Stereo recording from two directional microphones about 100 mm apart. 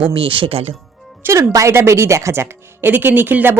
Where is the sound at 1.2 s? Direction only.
30° right (ahead or behind).